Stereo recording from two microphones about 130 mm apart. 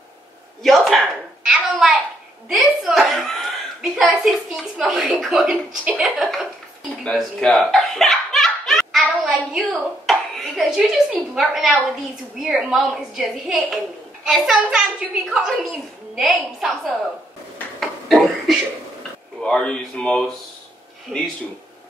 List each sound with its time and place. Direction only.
0.6 s a woman's voice: centre (ahead or behind)
1.5 s a sound: 5° right (ahead or behind)
2.4 s a woman's voice: 5° right (ahead or behind)
7.1 s laughter: centre (ahead or behind)
11.1 s a woman's voice: centre (ahead or behind)
17.7 s a sound: centre (ahead or behind)
19.4 s a woman's voice: 5° left (ahead or behind)